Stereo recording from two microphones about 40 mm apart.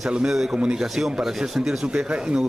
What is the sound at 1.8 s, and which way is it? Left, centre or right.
Speech, right.